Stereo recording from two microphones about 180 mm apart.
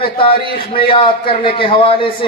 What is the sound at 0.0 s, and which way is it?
A man's voice, 30° left (ahead or behind).